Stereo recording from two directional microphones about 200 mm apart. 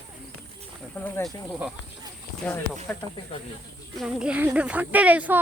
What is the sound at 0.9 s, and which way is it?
Speech, 10° left (ahead or behind).